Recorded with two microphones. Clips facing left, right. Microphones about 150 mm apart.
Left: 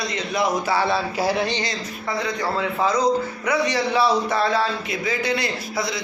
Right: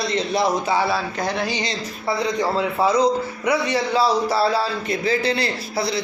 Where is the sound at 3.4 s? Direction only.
30° right (ahead or behind).